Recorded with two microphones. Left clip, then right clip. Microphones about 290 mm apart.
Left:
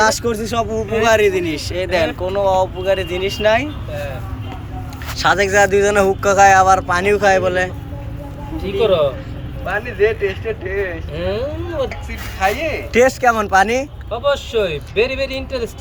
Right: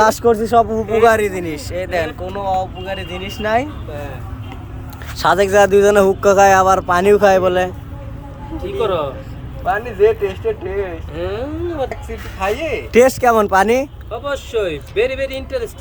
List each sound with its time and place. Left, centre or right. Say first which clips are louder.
0.0 s speech: right 3 dB; right
5.1 s speech: right 1 dB; right
8.8 s speech: left 4 dB; centre
9.6 s speech: right 3 dB; right
11.1 s speech: left 2 dB; centre
12.4 s speech: left 1 dB; right
14.1 s speech: left 8 dB; centre